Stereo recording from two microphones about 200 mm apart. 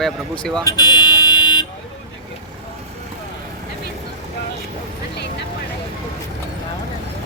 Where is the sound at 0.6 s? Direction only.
20° left (ahead or behind).